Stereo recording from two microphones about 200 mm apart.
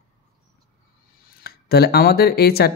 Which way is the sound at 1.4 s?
50° left (ahead or behind).